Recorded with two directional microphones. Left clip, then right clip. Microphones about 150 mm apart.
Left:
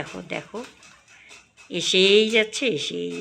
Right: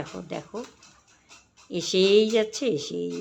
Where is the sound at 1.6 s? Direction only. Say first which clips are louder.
Left 4 dB; 10° right (ahead or behind).